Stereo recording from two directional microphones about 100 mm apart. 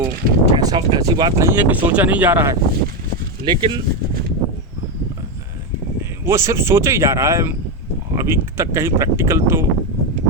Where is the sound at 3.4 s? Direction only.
50° right (ahead or behind).